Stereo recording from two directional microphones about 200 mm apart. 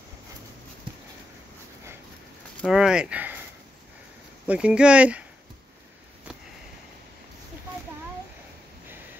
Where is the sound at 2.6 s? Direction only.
Centre (ahead or behind).